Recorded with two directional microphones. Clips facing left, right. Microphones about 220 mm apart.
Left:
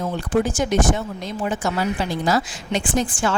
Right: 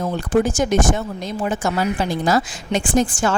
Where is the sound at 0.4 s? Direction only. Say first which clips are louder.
Right 2 dB; 45° right (ahead or behind).